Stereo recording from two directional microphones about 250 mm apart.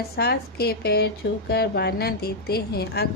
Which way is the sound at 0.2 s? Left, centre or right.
Left.